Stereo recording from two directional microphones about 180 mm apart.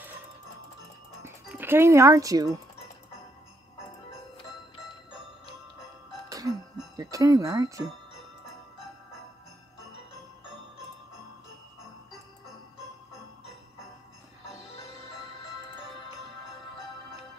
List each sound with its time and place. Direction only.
1.2 s speech: 10° right (ahead or behind)
6.2 s music: 20° right (ahead or behind)